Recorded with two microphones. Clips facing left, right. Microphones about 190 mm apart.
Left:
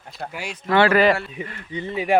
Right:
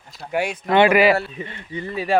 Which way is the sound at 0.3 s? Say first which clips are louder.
Right 13 dB; 60° right (ahead or behind).